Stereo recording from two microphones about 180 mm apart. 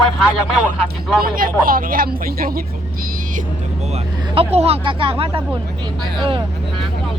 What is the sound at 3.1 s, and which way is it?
Vehicle, 45° right (ahead or behind).